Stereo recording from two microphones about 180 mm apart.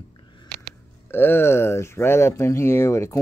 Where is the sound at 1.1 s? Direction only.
10° left (ahead or behind).